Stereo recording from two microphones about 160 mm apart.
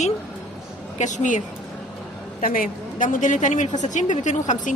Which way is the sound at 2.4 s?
60° left (ahead or behind).